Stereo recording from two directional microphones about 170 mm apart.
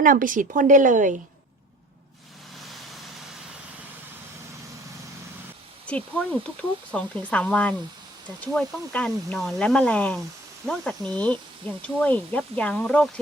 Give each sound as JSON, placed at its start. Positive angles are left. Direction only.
{"t": 0.0, "sound": "a woman's voice", "side_deg": -55}
{"t": 5.8, "sound": "speech", "side_deg": 5}